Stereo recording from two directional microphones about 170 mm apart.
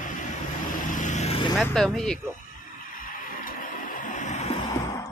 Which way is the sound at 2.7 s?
55° left (ahead or behind).